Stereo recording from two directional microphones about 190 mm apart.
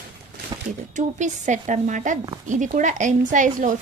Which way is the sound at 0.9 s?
40° right (ahead or behind).